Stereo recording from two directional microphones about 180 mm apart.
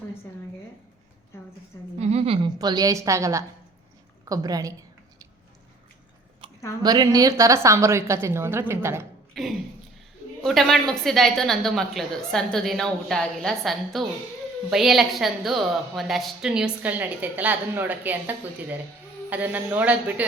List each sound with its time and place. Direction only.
2.0 s a woman's voice: 35° right (ahead or behind); by 4.7 s 20° right (ahead or behind)
6.4 s a sound: 30° right (ahead or behind)
6.8 s a woman's voice: 20° right (ahead or behind)
9.4 s a woman's voice: centre (ahead or behind)